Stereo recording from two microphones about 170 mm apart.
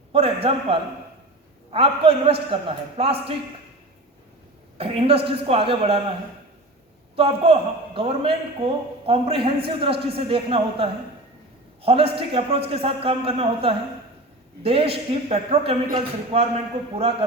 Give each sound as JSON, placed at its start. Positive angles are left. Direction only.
{"t": 0.1, "sound": "a man's voice", "side_deg": -35}
{"t": 4.8, "sound": "a man's voice", "side_deg": -35}
{"t": 7.2, "sound": "a man's voice", "side_deg": -35}